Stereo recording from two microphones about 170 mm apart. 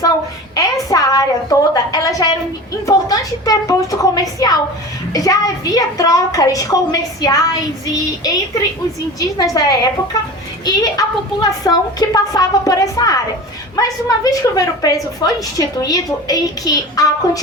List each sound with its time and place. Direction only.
0.5 s a woman's voice: 20° left (ahead or behind)